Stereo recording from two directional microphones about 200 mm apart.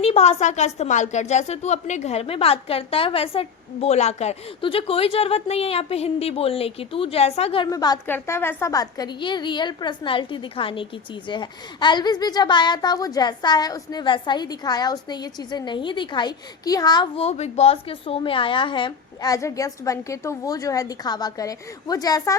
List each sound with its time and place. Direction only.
0.0 s a woman's voice: 30° left (ahead or behind)